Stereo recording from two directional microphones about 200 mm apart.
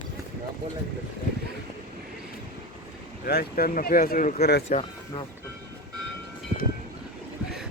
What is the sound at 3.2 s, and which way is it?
Speech, 50° left (ahead or behind).